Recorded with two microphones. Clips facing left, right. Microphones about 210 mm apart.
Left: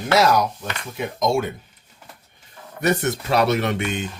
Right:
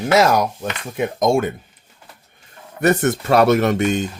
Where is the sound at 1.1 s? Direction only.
50° right (ahead or behind).